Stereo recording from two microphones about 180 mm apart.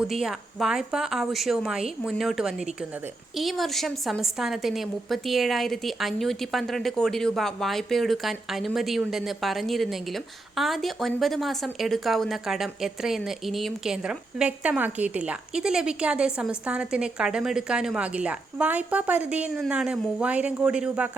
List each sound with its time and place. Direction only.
0.0 s a woman's voice: centre (ahead or behind)